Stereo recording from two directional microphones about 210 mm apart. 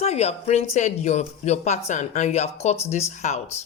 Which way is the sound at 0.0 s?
30° left (ahead or behind).